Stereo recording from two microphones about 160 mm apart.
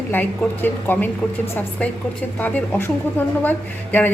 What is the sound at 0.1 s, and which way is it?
A woman's voice, 10° left (ahead or behind).